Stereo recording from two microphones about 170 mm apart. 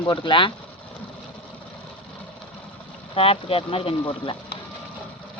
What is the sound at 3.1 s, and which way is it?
Speech, 35° left (ahead or behind).